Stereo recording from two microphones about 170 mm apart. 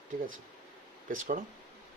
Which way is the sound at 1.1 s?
50° right (ahead or behind).